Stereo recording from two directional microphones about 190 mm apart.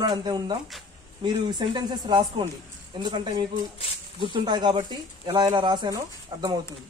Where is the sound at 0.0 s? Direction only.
20° right (ahead or behind).